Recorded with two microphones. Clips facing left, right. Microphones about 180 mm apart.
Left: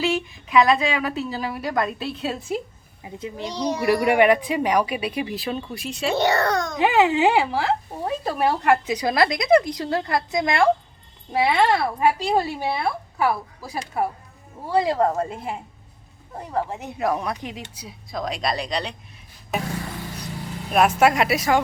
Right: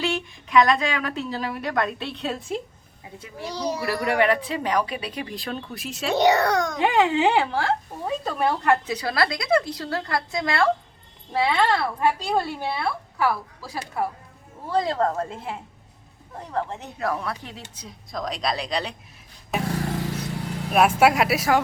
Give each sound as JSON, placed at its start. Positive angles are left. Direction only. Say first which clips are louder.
{"t": 0.0, "sound": "a woman's voice", "louder": "left 3 dB", "side_deg": 5}
{"t": 3.0, "sound": "a child's voice", "louder": "left 5 dB", "side_deg": 20}
{"t": 3.5, "sound": "a child's voice", "louder": "left 2 dB", "side_deg": -5}
{"t": 3.8, "sound": "speech", "louder": "left 6 dB", "side_deg": 15}
{"t": 6.1, "sound": "a child's voice", "louder": "right 3 dB", "side_deg": -15}
{"t": 6.7, "sound": "a woman's voice", "louder": "left 4 dB", "side_deg": 5}
{"t": 20.7, "sound": "a woman's voice", "louder": "even", "side_deg": -5}